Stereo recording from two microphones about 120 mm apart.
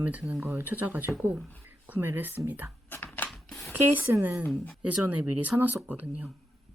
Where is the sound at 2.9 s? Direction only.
20° left (ahead or behind).